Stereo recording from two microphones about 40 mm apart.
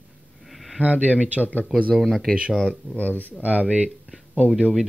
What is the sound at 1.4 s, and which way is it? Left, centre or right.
Speech, left.